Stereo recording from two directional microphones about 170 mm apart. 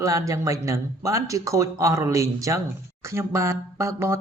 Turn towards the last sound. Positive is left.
turn(degrees=-15)  # may be behind; listen again after turning